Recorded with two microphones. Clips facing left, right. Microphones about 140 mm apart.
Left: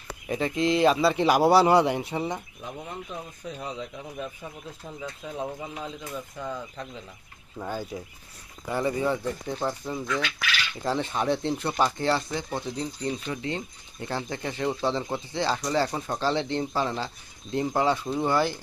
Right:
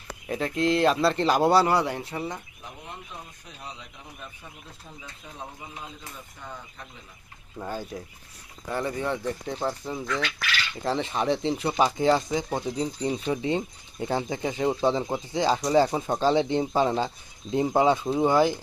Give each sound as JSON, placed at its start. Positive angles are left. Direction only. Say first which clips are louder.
{"t": 0.3, "sound": "speech", "louder": "even", "side_deg": 0}
{"t": 1.6, "sound": "speech", "louder": "left 4 dB", "side_deg": 20}
{"t": 7.6, "sound": "speech", "louder": "left 1 dB", "side_deg": 0}
{"t": 11.8, "sound": "speech", "louder": "right 4 dB", "side_deg": -10}